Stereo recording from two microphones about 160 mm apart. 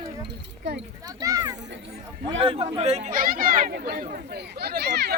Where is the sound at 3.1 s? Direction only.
60° right (ahead or behind).